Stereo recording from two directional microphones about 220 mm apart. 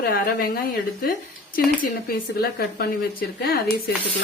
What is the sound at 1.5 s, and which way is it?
Speech, 40° left (ahead or behind).